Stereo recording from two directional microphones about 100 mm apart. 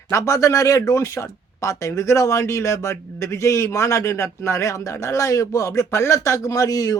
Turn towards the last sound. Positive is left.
turn(degrees=35)  # may be behind; listen again after turning